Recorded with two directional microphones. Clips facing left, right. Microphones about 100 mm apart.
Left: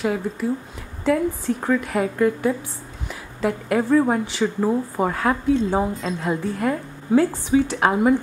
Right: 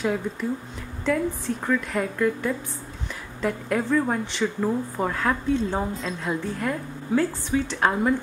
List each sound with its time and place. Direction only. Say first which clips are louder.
0.0 s a woman's voice: left 3 dB; 5° left (ahead or behind)
3.1 s a sound: left 4 dB; 5° left (ahead or behind)
3.9 s a woman's voice: left 7 dB; 20° left (ahead or behind)